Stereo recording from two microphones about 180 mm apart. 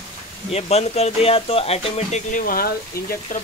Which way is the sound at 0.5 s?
35° left (ahead or behind).